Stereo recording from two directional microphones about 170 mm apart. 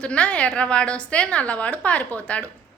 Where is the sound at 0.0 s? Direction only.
5° left (ahead or behind).